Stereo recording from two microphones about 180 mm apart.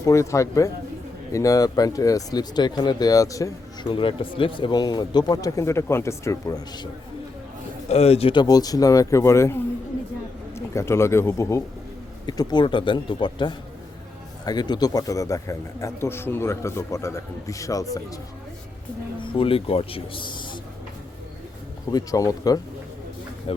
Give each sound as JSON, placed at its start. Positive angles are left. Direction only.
{"t": 0.0, "sound": "speech", "side_deg": 15}
{"t": 7.9, "sound": "a man's voice", "side_deg": 35}
{"t": 19.2, "sound": "speech", "side_deg": 30}
{"t": 21.9, "sound": "speech", "side_deg": 20}